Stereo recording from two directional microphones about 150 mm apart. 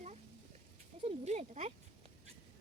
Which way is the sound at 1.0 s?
45° right (ahead or behind).